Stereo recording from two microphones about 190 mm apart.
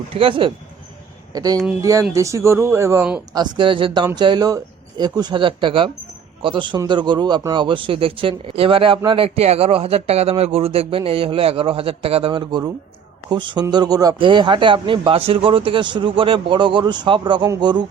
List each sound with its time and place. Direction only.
0.1 s speech: 30° right (ahead or behind); by 3.2 s 10° right (ahead or behind)
3.3 s speech: 25° right (ahead or behind)